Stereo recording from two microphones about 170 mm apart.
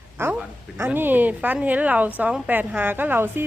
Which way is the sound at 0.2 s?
15° right (ahead or behind).